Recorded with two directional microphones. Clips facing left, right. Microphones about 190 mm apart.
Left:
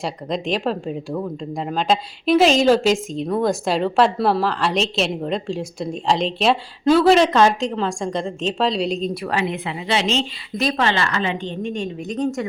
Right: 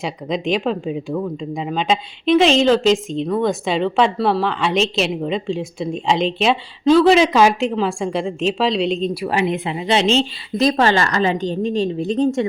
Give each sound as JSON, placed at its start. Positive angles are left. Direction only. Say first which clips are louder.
{"t": 0.0, "sound": "a woman's voice", "louder": "right 2 dB", "side_deg": 0}
{"t": 9.2, "sound": "a woman's voice", "louder": "right 4 dB", "side_deg": -15}